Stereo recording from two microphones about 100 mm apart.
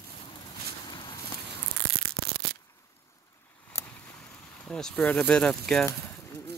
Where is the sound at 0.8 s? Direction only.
50° left (ahead or behind).